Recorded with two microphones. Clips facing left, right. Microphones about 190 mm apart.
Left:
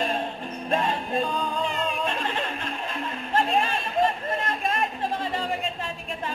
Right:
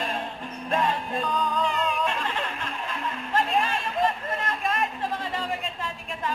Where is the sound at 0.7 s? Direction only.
25° left (ahead or behind).